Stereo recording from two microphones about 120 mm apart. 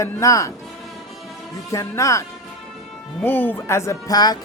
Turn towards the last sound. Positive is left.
turn(degrees=30)  # may be behind; listen again after turning